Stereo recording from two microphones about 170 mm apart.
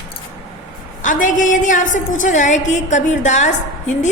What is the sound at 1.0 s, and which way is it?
A woman's voice, 50° left (ahead or behind).